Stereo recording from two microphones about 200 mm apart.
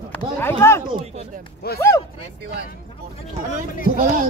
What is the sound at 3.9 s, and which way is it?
Speech, 40° right (ahead or behind).